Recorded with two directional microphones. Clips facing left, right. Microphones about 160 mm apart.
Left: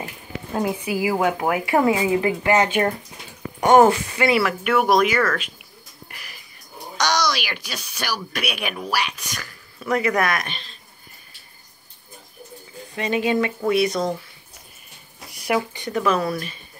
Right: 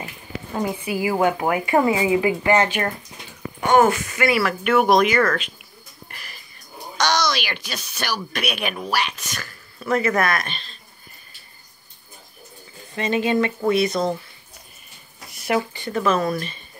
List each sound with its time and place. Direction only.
0.5 s speech: 5° left (ahead or behind)
3.6 s speech: 30° left (ahead or behind)
4.4 s speech: 10° left (ahead or behind)
6.0 s a sound: 10° left (ahead or behind)
7.0 s speech: 10° left (ahead or behind)
12.9 s speech: 10° left (ahead or behind)
15.3 s speech: 15° left (ahead or behind)